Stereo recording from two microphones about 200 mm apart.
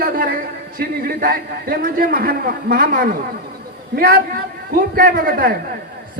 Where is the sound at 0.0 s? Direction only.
45° right (ahead or behind).